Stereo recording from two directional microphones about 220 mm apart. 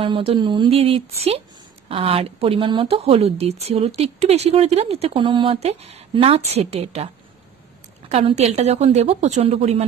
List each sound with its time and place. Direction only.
0.0 s speech: 25° right (ahead or behind)
8.1 s speech: 30° right (ahead or behind)